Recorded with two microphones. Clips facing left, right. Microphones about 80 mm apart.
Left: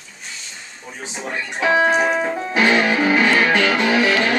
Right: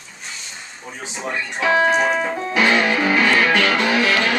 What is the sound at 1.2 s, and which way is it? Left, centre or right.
A man's voice, centre.